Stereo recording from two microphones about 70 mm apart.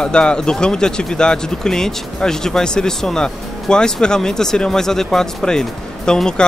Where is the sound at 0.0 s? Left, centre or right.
Centre.